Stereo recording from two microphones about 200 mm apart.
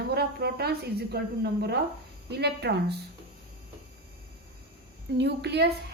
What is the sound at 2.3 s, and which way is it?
Speech, 55° right (ahead or behind).